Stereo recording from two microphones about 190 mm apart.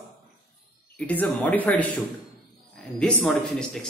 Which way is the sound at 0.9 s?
5° left (ahead or behind).